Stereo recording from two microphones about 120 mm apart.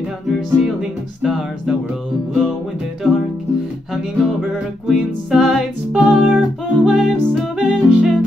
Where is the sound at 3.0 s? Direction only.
Centre (ahead or behind).